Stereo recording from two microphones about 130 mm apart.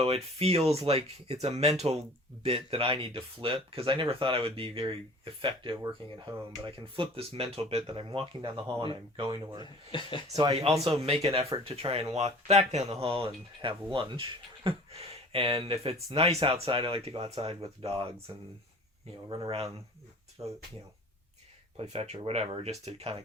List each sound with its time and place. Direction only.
0.0 s speech: 50° right (ahead or behind); by 9.6 s 35° right (ahead or behind)
9.9 s speech: 40° left (ahead or behind)
10.8 s speech: 50° right (ahead or behind)
19.5 s speech: 50° right (ahead or behind)
20.4 s speech: 30° right (ahead or behind)
21.8 s speech: 55° right (ahead or behind)